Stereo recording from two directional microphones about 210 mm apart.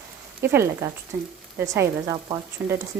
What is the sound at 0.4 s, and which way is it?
A woman's voice, 10° right (ahead or behind).